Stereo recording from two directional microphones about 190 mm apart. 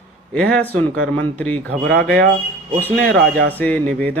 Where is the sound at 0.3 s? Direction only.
5° left (ahead or behind).